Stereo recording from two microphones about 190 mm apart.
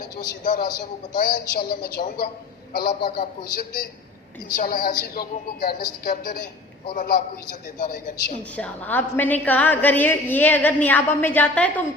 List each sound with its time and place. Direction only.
0.4 s speech: 50° left (ahead or behind)
8.5 s a woman's voice: 5° left (ahead or behind)